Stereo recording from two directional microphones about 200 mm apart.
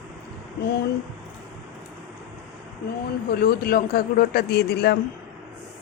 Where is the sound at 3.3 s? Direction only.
50° left (ahead or behind).